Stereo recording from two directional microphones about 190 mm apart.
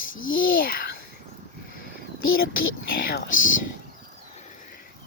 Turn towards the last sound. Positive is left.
turn(degrees=45)  # may be behind; listen again after turning